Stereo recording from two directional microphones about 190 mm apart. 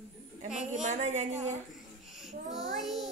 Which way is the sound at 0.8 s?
35° right (ahead or behind).